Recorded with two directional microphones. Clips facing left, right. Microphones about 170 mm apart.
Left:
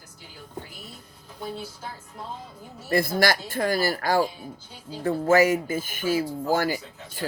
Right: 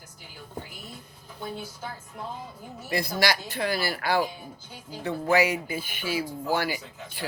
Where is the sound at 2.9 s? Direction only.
50° left (ahead or behind).